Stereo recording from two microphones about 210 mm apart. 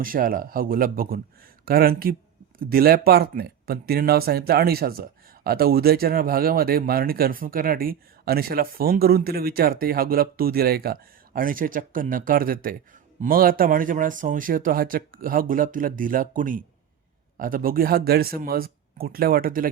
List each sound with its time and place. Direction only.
0.0 s speech: 45° right (ahead or behind)